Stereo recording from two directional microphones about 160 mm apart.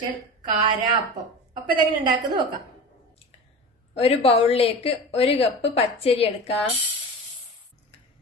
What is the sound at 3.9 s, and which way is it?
A woman's voice, 40° left (ahead or behind).